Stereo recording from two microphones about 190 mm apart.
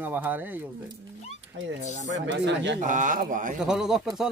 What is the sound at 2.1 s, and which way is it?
Speech, 70° right (ahead or behind).